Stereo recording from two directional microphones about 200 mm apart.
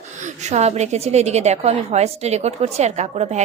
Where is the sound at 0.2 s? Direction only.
35° right (ahead or behind).